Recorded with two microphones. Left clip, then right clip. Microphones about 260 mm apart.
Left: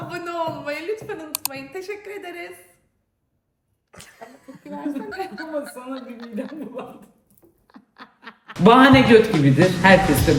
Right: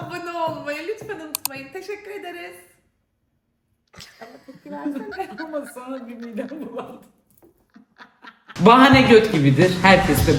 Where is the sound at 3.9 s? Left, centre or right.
Centre.